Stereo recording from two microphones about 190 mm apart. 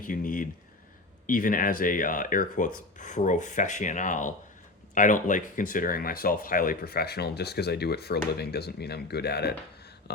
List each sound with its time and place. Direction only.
0.0 s speech: 45° left (ahead or behind)